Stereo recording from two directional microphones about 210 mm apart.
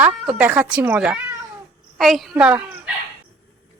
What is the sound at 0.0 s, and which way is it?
Speech, 5° right (ahead or behind).